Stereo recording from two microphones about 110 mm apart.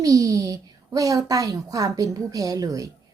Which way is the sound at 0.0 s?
30° right (ahead or behind).